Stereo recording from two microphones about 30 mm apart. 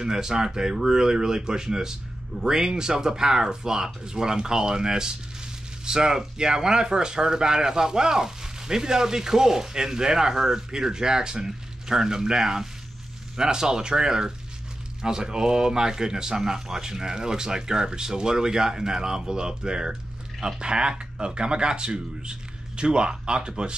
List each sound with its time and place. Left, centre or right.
0.0 s speech: right